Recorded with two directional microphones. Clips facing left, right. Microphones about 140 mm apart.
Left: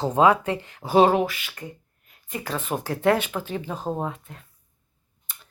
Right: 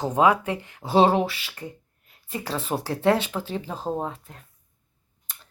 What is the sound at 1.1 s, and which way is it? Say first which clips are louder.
Speech: left 1 dB; 30° right (ahead or behind).